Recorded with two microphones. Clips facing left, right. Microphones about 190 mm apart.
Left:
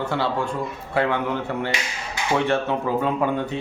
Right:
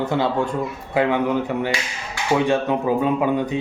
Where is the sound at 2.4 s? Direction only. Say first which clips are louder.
Right 3 dB; 15° right (ahead or behind).